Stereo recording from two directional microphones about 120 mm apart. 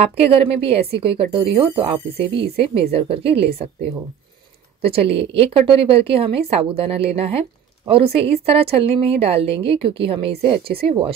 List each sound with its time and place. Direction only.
0.2 s speech: 55° right (ahead or behind)
4.8 s speech: 50° right (ahead or behind)